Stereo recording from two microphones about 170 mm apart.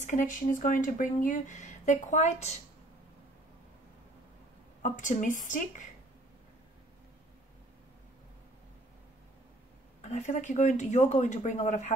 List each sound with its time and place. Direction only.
0.0 s speech: 50° left (ahead or behind)
4.8 s speech: 50° left (ahead or behind)
10.0 s speech: 45° left (ahead or behind)